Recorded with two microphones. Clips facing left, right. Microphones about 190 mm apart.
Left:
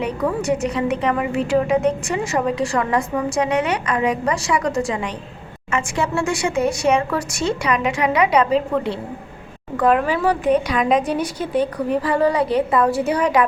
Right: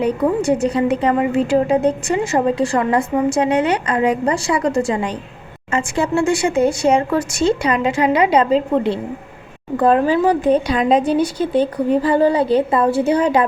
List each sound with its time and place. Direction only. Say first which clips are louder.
0.0 s a woman's voice: right 5 dB; 30° right (ahead or behind)